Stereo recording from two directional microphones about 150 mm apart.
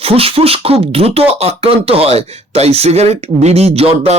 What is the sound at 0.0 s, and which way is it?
Speech, 40° right (ahead or behind).